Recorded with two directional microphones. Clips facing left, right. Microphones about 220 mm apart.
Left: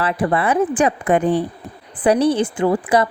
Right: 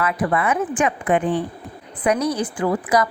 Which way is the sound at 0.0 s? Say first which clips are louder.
Left 2 dB; 30° left (ahead or behind).